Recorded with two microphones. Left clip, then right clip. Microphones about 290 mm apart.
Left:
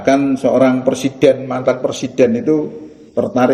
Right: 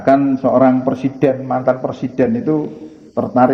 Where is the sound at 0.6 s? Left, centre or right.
Centre.